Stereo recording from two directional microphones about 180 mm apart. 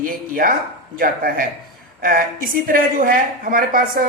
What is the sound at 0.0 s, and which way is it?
A woman's voice, 50° right (ahead or behind).